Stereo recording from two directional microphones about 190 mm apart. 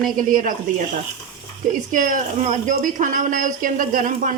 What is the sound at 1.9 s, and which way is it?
Speech, 45° right (ahead or behind).